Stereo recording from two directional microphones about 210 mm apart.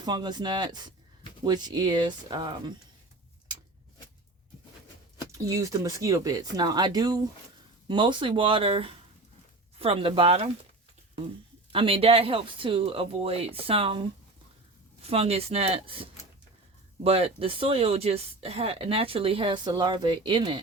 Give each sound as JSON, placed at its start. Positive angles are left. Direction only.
{"t": 0.0, "sound": "speech", "side_deg": -20}
{"t": 5.3, "sound": "speech", "side_deg": -15}
{"t": 11.7, "sound": "speech", "side_deg": -25}